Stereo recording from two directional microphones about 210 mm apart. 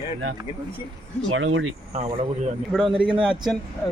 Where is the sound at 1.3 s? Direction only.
70° right (ahead or behind).